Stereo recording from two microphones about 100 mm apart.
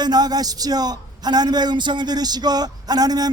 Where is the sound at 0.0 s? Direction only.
40° right (ahead or behind).